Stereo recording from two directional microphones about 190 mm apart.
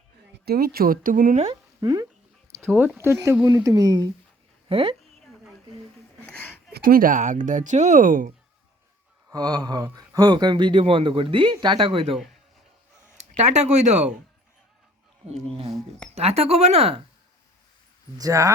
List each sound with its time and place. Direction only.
0.4 s speech: 55° right (ahead or behind)
1.8 s speech: 20° right (ahead or behind)
2.7 s speech: 10° right (ahead or behind); by 4.9 s 30° right (ahead or behind)
6.2 s a sound: 5° left (ahead or behind)
6.7 s speech: 50° right (ahead or behind)
9.3 s speech: 20° right (ahead or behind)
13.3 s speech: 35° right (ahead or behind)
16.1 s speech: 35° right (ahead or behind)
18.2 s speech: 15° right (ahead or behind)